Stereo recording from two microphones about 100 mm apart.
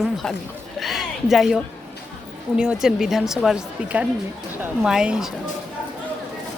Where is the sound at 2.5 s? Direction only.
5° right (ahead or behind).